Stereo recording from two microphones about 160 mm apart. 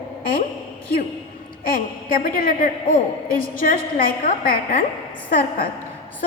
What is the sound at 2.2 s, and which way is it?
A woman's voice, 60° left (ahead or behind).